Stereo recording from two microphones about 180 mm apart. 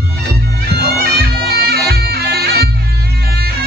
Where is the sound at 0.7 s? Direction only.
60° right (ahead or behind).